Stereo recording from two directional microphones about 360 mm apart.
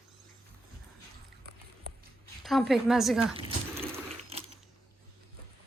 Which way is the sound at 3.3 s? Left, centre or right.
Centre.